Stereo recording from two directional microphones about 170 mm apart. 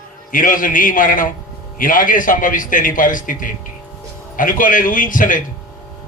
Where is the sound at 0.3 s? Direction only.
50° left (ahead or behind).